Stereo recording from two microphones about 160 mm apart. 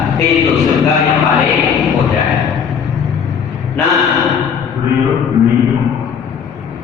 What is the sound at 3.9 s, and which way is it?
Gasp, centre (ahead or behind).